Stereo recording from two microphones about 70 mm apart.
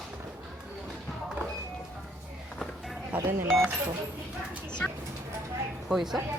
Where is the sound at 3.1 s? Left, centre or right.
Right.